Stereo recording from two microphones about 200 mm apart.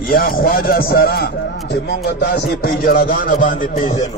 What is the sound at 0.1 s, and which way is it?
A man's voice, 50° left (ahead or behind).